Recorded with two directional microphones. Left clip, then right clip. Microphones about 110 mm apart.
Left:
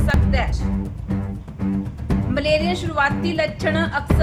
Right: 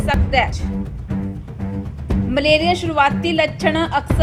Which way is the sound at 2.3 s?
45° right (ahead or behind).